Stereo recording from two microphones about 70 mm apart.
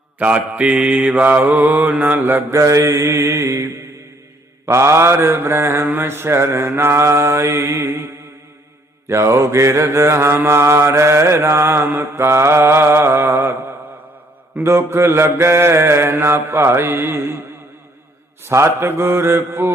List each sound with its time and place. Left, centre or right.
0.2 s mantra: right
2.5 s mantra: right
14.6 s mantra: right
18.4 s mantra: right